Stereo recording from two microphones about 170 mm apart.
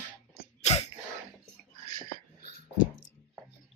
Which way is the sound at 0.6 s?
40° left (ahead or behind).